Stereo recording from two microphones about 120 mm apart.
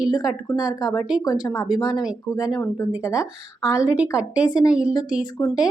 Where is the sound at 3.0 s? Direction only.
30° left (ahead or behind).